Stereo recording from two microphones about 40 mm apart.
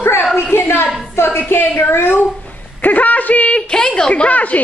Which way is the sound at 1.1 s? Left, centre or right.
Left.